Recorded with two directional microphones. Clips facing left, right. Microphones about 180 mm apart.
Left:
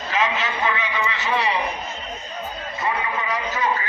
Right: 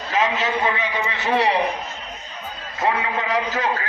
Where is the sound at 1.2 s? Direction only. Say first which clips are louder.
Right 5 dB; 60° right (ahead or behind).